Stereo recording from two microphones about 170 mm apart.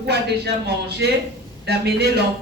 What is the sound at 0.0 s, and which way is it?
Speech, 75° right (ahead or behind).